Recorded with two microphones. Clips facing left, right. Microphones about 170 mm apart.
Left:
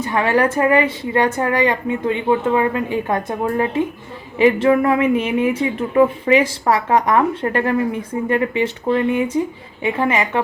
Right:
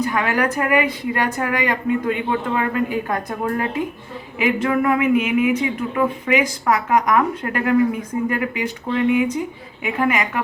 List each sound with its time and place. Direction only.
0.0 s a woman's voice: 25° left (ahead or behind)